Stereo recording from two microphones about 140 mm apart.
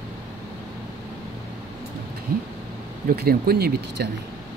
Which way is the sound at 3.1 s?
90° right.